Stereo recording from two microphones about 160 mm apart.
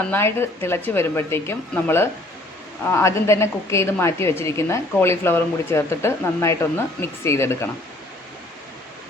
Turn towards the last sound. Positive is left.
turn(degrees=15)  # may be behind; listen again after turning